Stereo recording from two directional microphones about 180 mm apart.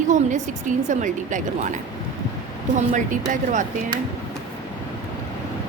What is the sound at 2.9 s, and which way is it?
Speech, 45° right (ahead or behind).